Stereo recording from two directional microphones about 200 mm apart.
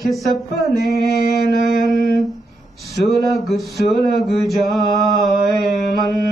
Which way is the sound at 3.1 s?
Centre (ahead or behind).